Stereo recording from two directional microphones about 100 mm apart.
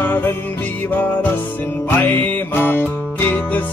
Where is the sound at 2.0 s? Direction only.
20° left (ahead or behind).